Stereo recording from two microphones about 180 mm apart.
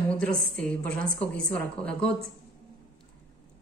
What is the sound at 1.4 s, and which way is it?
Speech, 55° right (ahead or behind).